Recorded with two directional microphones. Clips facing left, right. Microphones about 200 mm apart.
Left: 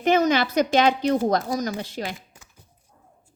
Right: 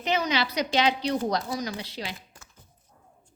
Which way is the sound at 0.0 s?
50° left (ahead or behind).